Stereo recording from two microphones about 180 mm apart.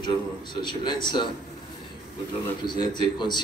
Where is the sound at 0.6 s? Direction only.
25° left (ahead or behind).